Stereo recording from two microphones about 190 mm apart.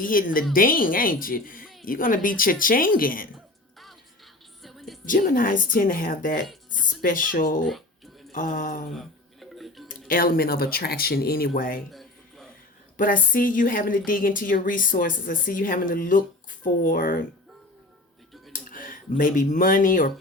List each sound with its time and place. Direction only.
0.0 s a woman's voice: 45° left (ahead or behind)
4.6 s music: centre (ahead or behind)
5.0 s a woman's voice: 45° left (ahead or behind)
9.0 s a sound: centre (ahead or behind)
10.1 s a woman's voice: 50° left (ahead or behind)
11.9 s a sound: centre (ahead or behind)
13.0 s a woman's voice: 45° left (ahead or behind)
18.5 s speech: 45° left (ahead or behind)